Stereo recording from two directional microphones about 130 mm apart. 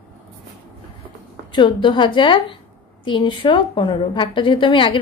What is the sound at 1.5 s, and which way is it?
A woman's voice, 40° left (ahead or behind).